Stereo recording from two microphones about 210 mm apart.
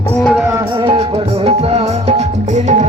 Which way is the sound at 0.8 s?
25° right (ahead or behind).